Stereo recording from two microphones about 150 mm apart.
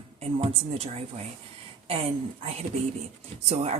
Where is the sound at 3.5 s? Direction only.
45° right (ahead or behind).